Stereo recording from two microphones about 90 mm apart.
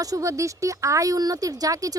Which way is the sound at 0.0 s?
40° right (ahead or behind).